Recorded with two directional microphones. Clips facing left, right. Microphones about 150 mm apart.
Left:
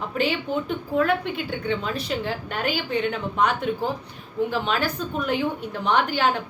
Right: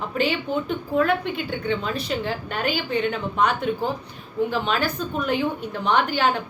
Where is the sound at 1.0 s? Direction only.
5° left (ahead or behind).